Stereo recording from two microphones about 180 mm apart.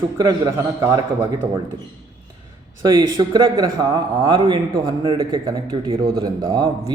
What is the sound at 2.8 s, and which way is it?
A man's voice, 25° right (ahead or behind).